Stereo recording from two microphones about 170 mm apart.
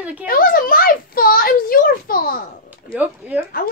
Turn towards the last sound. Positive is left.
turn(degrees=-10)  # may be behind; listen again after turning